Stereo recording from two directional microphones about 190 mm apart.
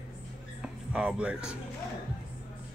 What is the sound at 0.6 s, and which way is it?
Music, 5° right (ahead or behind).